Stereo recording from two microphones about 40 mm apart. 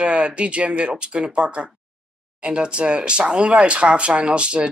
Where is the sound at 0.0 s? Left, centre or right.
Right.